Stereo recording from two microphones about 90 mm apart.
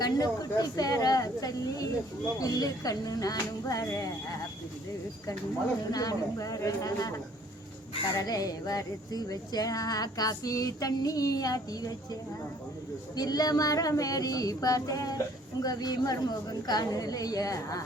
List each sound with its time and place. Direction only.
0.0 s speech: 45° left (ahead or behind)
3.8 s female singing: 40° left (ahead or behind)
5.9 s female singing: 40° left (ahead or behind)
8.1 s speech: 40° left (ahead or behind)
13.1 s female singing: 45° left (ahead or behind)
15.6 s speech: 45° left (ahead or behind)